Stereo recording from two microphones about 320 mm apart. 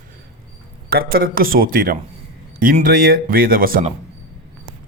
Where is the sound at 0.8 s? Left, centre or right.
Right.